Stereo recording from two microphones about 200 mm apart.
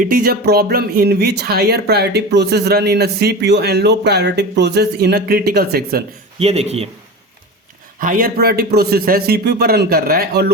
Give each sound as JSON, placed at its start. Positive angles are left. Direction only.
{"t": 0.0, "sound": "speech", "side_deg": -50}
{"t": 6.4, "sound": "a man's voice", "side_deg": -30}
{"t": 7.9, "sound": "speech", "side_deg": -45}